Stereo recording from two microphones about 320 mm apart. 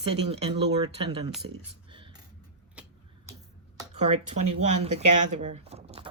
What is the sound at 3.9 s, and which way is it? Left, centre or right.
Speech, right.